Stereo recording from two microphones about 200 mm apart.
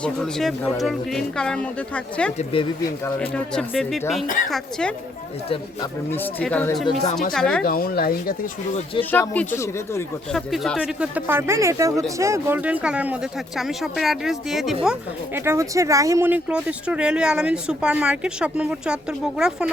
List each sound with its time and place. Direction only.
0.0 s speech: 5° left (ahead or behind)
2.4 s speech: 25° left (ahead or behind)
3.2 s speech: 5° left (ahead or behind)
6.1 s speech: 10° left (ahead or behind)
7.6 s speech: 50° left (ahead or behind)
9.0 s speech: 10° left (ahead or behind)
15.4 s speech: 15° right (ahead or behind)